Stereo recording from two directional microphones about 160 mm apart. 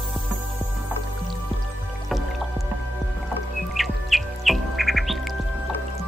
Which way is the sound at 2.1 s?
Centre (ahead or behind).